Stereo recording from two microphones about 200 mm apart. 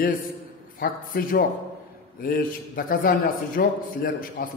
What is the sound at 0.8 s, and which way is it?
A man's voice, 45° left (ahead or behind).